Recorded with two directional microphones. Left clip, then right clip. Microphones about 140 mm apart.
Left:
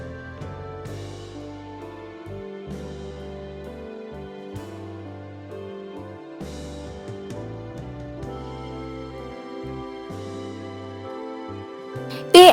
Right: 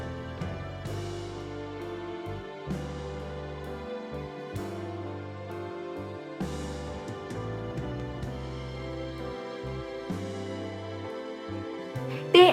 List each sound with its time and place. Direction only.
12.1 s music: 70° left (ahead or behind)